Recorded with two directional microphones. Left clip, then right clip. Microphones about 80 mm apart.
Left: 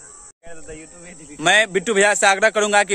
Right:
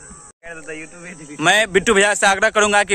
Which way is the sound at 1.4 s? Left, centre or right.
Centre.